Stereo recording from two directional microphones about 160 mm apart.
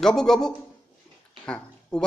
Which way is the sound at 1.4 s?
5° left (ahead or behind).